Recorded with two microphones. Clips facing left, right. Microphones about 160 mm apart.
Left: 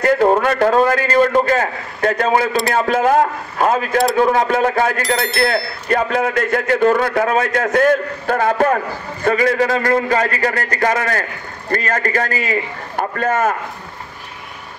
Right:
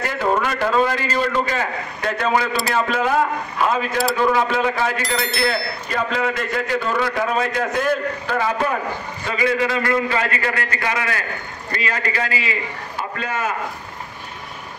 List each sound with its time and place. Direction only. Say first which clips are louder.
0.0 s a man's voice: left 7 dB; 50° left (ahead or behind)
5.0 s speech: left 4 dB; centre (ahead or behind)
5.5 s a man's voice: left 6 dB; 50° left (ahead or behind)